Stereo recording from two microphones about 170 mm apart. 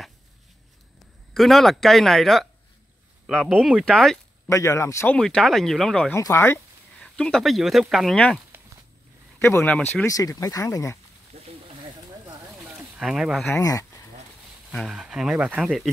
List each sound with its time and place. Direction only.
1.3 s speech: centre (ahead or behind)
4.5 s speech: 15° left (ahead or behind)
5.1 s speech: 5° left (ahead or behind)
6.1 s speech: 15° left (ahead or behind)
9.4 s speech: 15° left (ahead or behind)
10.1 s speech: 20° left (ahead or behind)
11.3 s a sound: 35° right (ahead or behind)
12.6 s a sound: 5° right (ahead or behind)
13.5 s speech: 20° left (ahead or behind)
14.7 s speech: centre (ahead or behind)